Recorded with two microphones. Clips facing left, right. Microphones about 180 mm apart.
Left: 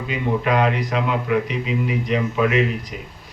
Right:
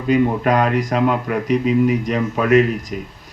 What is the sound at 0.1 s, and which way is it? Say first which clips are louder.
Speech: right 6 dB; 45° right (ahead or behind).